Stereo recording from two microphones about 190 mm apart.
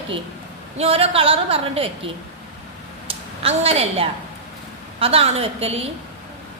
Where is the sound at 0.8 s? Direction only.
30° right (ahead or behind).